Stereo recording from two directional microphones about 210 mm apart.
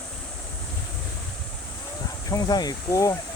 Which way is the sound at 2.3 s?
20° left (ahead or behind).